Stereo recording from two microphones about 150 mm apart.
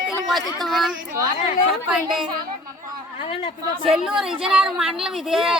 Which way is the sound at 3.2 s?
40° left (ahead or behind).